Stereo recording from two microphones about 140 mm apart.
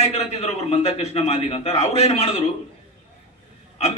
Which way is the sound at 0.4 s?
50° left (ahead or behind).